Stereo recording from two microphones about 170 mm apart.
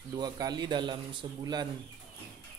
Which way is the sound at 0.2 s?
25° right (ahead or behind).